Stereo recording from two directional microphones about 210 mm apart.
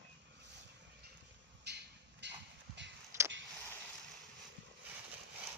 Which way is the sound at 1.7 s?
55° right (ahead or behind).